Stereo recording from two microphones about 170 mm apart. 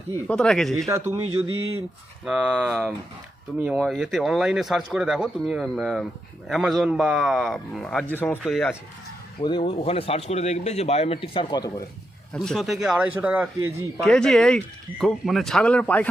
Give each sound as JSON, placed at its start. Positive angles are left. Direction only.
{"t": 0.3, "sound": "speech", "side_deg": 5}
{"t": 0.9, "sound": "a man's voice", "side_deg": -15}
{"t": 2.2, "sound": "speech", "side_deg": -5}
{"t": 8.4, "sound": "speech", "side_deg": 0}
{"t": 9.4, "sound": "speech", "side_deg": 30}
{"t": 12.3, "sound": "speech", "side_deg": 0}
{"t": 14.0, "sound": "speech", "side_deg": 5}